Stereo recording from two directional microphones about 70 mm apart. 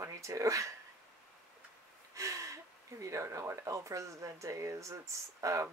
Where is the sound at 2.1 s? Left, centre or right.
Right.